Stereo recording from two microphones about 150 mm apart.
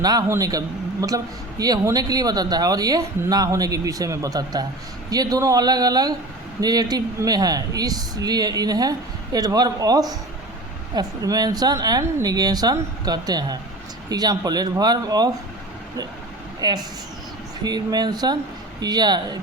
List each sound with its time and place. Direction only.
0.0 s speech: 25° right (ahead or behind)
16.6 s speech: 25° right (ahead or behind)